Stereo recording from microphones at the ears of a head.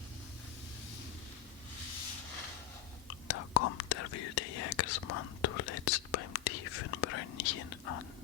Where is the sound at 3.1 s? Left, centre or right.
Left.